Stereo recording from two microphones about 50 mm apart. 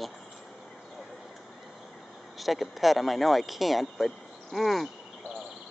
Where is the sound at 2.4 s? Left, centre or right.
Centre.